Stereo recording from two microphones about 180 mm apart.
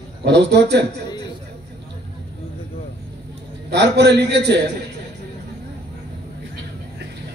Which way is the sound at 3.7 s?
70° right (ahead or behind).